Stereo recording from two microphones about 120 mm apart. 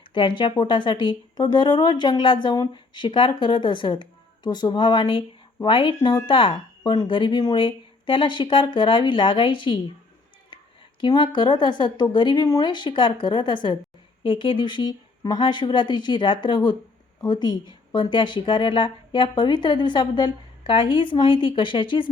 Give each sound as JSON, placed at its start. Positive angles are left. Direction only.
{"t": 0.1, "sound": "speech", "side_deg": 45}
{"t": 11.0, "sound": "speech", "side_deg": 40}